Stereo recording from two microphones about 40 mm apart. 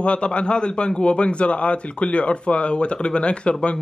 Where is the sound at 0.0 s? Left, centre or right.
Left.